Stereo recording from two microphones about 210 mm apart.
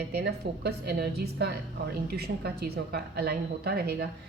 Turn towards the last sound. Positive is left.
turn(degrees=-50)  # may be behind; listen again after turning